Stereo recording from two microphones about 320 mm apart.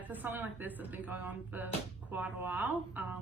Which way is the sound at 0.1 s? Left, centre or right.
Centre.